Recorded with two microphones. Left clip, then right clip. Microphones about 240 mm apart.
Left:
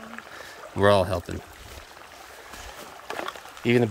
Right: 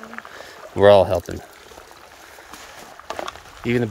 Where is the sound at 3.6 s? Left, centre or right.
Centre.